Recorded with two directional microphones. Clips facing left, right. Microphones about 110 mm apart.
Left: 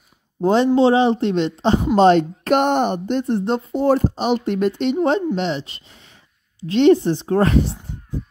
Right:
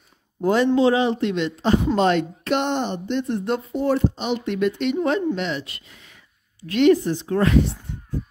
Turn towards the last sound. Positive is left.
turn(degrees=35)  # may be behind; listen again after turning